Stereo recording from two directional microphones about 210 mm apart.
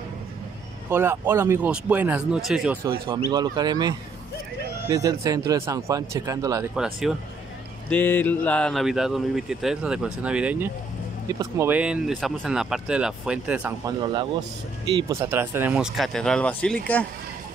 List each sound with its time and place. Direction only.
0.8 s speech: 10° right (ahead or behind)
3.3 s speech: 20° right (ahead or behind)
6.7 s speech: centre (ahead or behind)
7.9 s speech: 10° left (ahead or behind); by 13.9 s 5° right (ahead or behind)
14.9 s speech: 20° right (ahead or behind); by 17.1 s 5° left (ahead or behind)